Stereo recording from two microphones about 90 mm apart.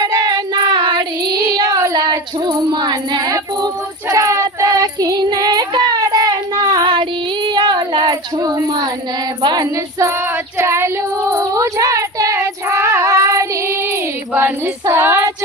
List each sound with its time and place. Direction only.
0.0 s child singing: 50° right (ahead or behind)
4.1 s child singing: 35° right (ahead or behind); by 8.5 s 50° right (ahead or behind)
8.5 s speech: 50° right (ahead or behind)
9.4 s female singing: 55° right (ahead or behind)
10.6 s child singing: 30° right (ahead or behind)